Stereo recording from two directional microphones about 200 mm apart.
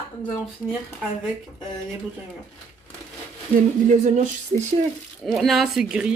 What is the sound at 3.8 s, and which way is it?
Speech, 40° right (ahead or behind).